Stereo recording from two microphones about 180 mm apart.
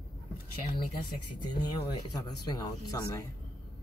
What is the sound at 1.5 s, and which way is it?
Speech, 20° left (ahead or behind).